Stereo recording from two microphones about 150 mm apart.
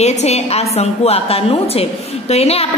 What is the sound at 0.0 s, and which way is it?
A woman's voice, 45° left (ahead or behind).